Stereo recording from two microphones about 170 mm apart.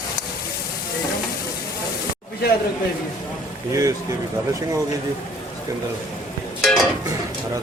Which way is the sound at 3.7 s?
20° right (ahead or behind).